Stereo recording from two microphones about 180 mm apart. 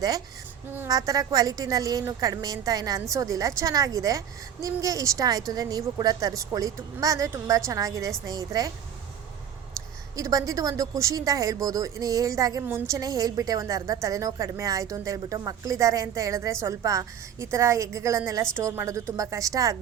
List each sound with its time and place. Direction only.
0.7 s speech: 15° right (ahead or behind)
10.2 s a woman's voice: 20° right (ahead or behind)